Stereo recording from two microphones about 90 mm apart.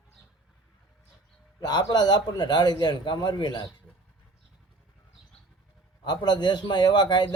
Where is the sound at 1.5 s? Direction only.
50° left (ahead or behind).